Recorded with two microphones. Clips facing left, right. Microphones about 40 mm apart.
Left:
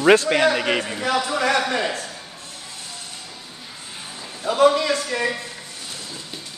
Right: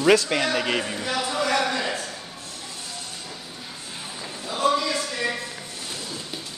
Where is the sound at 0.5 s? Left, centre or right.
Centre.